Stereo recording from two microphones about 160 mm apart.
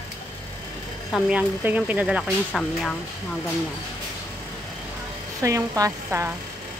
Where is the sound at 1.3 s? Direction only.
10° right (ahead or behind).